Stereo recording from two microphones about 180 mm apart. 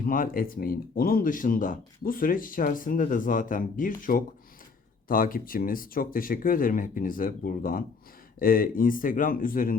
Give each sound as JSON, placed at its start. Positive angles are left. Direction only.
{"t": 0.0, "sound": "speech", "side_deg": 50}